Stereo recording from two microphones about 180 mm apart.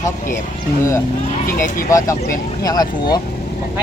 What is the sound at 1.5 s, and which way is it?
Speech, 50° left (ahead or behind).